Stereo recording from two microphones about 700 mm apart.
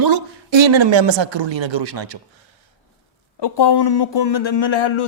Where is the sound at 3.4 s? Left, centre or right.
Left.